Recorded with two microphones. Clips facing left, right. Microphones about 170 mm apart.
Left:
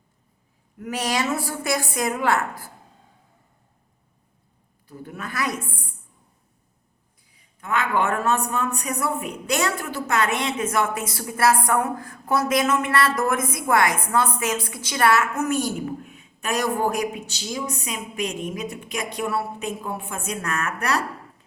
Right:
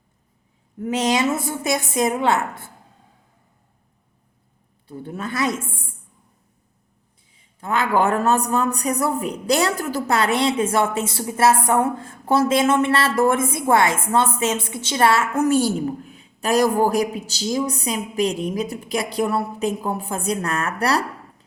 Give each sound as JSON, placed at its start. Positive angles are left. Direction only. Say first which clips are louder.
{"t": 0.8, "sound": "a woman's voice", "louder": "right 5 dB", "side_deg": -20}
{"t": 4.9, "sound": "a woman's voice", "louder": "right 6 dB", "side_deg": -30}
{"t": 7.3, "sound": "a man's voice", "louder": "right 3 dB", "side_deg": -35}